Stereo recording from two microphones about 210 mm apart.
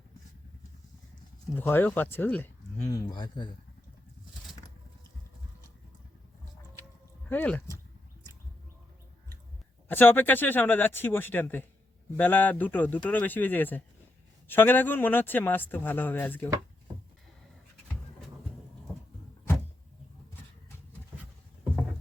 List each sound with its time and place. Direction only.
1.5 s speech: 10° left (ahead or behind)
7.3 s speech: 5° left (ahead or behind)
9.9 s speech: 10° left (ahead or behind)